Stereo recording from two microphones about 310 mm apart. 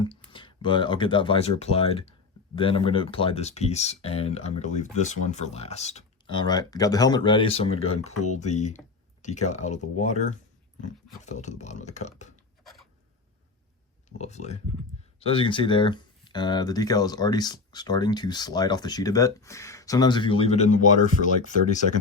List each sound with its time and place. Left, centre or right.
0.3 s speech: centre
12.6 s filing: centre
14.2 s speech: left